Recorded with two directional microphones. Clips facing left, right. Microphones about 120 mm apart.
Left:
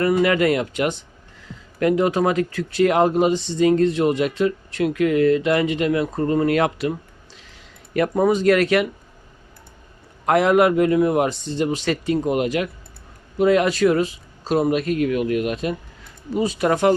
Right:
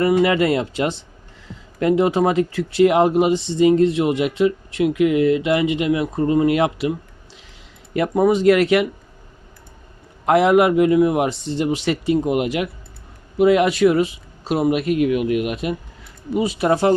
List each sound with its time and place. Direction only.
0.2 s speech: 25° right (ahead or behind)
7.9 s speech: 20° right (ahead or behind)
10.2 s a man's voice: 20° right (ahead or behind)
16.6 s speech: 25° right (ahead or behind)